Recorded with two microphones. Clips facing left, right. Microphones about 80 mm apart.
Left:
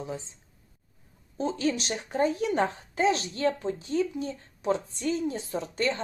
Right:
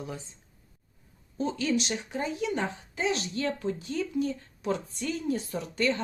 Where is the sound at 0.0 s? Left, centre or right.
Left.